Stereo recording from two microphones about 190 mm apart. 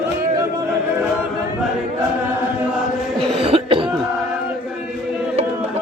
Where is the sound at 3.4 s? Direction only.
30° right (ahead or behind).